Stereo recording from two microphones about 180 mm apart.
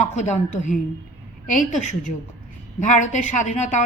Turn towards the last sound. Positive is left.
turn(degrees=40)  # may be behind; listen again after turning